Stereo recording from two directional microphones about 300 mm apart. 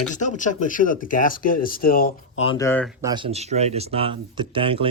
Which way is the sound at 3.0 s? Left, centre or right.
Centre.